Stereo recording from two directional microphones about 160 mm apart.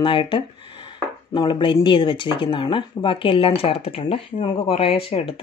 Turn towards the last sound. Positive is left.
turn(degrees=35)  # may be behind; listen again after turning